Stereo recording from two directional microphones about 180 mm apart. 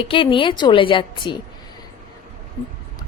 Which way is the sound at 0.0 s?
30° left (ahead or behind).